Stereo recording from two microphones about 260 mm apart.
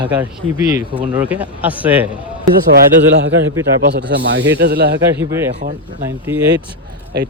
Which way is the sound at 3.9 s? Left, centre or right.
Right.